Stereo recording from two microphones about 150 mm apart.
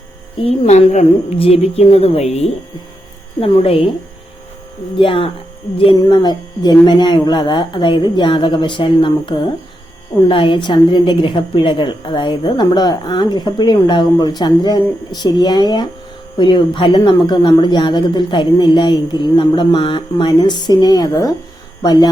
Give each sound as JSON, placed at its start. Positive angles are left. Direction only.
{"t": 0.4, "sound": "a woman's voice", "side_deg": 45}
{"t": 4.9, "sound": "a woman's voice", "side_deg": 35}